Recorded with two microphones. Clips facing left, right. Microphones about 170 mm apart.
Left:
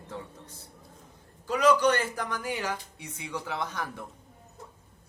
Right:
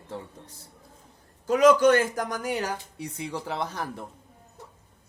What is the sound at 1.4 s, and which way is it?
A man's voice, 45° right (ahead or behind).